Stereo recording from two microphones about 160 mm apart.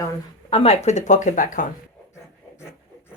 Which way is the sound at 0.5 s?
40° left (ahead or behind).